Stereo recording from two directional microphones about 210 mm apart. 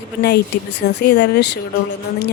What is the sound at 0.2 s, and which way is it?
Speech, 50° left (ahead or behind).